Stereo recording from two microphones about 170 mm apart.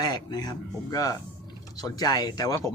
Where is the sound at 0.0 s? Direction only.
25° left (ahead or behind).